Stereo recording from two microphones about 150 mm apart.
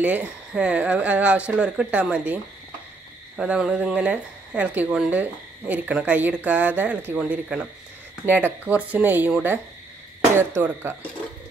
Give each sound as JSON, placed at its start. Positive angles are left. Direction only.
{"t": 0.0, "sound": "speech", "side_deg": -10}
{"t": 3.3, "sound": "speech", "side_deg": -5}